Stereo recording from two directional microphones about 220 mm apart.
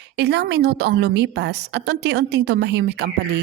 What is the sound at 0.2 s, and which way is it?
A woman's voice, 50° right (ahead or behind).